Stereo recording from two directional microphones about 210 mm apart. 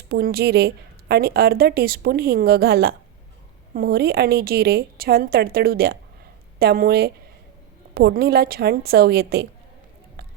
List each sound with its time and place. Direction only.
0.1 s a woman's voice: 45° right (ahead or behind)